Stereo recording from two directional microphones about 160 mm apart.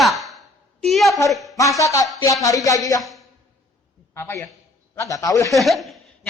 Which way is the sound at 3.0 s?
Centre (ahead or behind).